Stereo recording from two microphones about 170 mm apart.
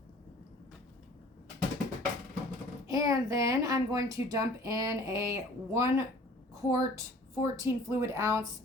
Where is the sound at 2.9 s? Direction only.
20° right (ahead or behind).